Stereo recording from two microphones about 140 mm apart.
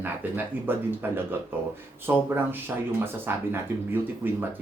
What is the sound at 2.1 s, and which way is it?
Speech, 20° right (ahead or behind).